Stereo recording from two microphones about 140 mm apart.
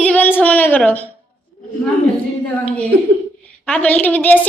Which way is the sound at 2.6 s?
10° left (ahead or behind).